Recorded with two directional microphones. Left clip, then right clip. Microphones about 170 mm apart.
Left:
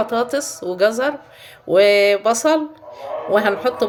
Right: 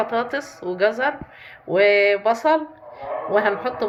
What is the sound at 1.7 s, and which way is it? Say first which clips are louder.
A woman's voice: left 3 dB; 85° left.